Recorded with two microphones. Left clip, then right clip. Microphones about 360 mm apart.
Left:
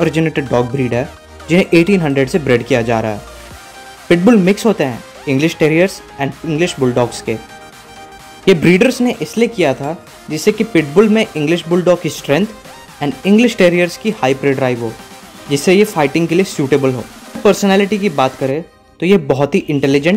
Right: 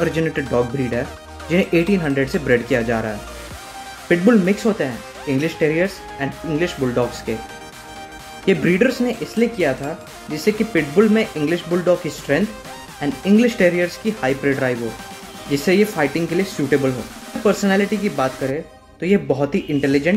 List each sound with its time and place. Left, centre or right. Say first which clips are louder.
0.0 s speech: left 5 dB; centre
8.5 s speech: left 6 dB; left